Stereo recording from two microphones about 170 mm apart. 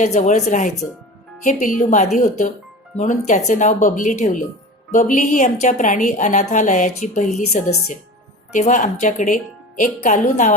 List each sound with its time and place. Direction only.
0.0 s a woman's voice: 40° left (ahead or behind)
8.5 s a woman's voice: 45° left (ahead or behind)